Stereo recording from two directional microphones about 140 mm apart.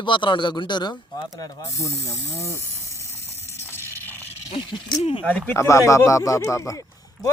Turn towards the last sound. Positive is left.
turn(degrees=25)  # may be behind; listen again after turning